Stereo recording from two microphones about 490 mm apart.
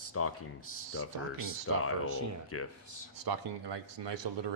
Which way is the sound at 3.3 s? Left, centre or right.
Right.